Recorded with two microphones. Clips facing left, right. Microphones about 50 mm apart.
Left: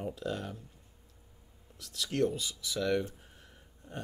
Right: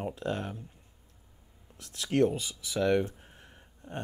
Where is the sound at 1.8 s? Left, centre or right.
Right.